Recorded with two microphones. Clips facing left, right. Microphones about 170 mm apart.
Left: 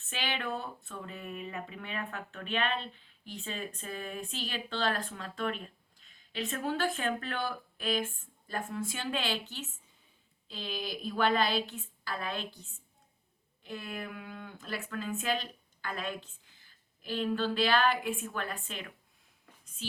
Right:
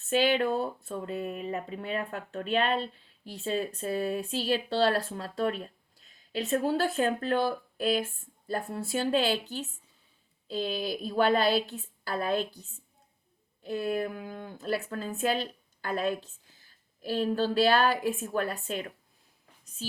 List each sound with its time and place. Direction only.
0.0 s speech: 40° right (ahead or behind)
13.6 s speech: 40° right (ahead or behind)